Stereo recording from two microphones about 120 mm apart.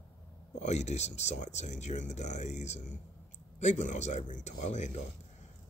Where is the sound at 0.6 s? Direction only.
70° left (ahead or behind).